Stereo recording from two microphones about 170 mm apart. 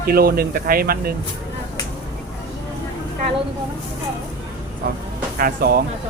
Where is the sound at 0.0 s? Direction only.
60° right (ahead or behind).